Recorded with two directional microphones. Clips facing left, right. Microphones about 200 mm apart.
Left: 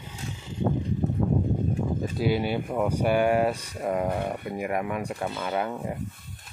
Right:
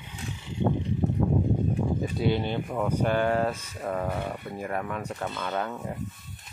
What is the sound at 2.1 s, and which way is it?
Speech, 5° left (ahead or behind).